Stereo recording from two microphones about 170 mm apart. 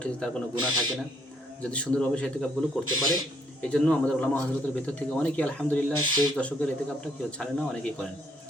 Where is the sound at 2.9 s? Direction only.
25° right (ahead or behind).